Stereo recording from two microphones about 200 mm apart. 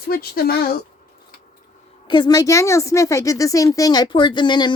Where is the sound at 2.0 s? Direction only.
20° left (ahead or behind).